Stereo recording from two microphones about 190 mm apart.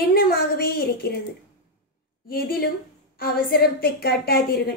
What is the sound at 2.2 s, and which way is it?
A woman's voice, 50° left (ahead or behind).